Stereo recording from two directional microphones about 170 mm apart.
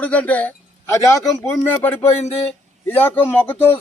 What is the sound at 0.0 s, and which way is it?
Speech, 10° left (ahead or behind).